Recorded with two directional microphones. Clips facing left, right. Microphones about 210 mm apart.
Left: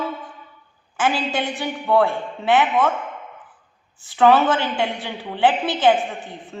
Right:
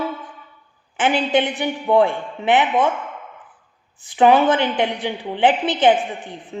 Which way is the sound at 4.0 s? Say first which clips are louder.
Right 1 dB; 15° right (ahead or behind).